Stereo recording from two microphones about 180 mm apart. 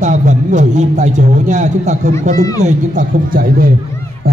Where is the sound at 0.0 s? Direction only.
40° right (ahead or behind).